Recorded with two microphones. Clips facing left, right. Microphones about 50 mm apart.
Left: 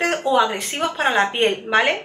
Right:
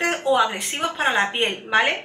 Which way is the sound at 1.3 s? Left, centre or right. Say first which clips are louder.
Left 3 dB; centre.